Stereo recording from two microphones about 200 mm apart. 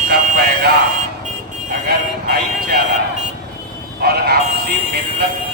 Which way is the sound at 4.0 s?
50° right (ahead or behind).